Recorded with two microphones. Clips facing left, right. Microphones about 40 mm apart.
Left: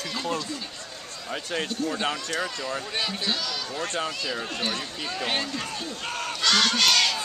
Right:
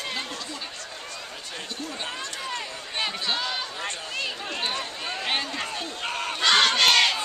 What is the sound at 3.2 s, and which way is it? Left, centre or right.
Speech, right.